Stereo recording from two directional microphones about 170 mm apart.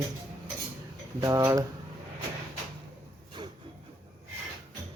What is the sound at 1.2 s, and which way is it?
Speech, 20° right (ahead or behind).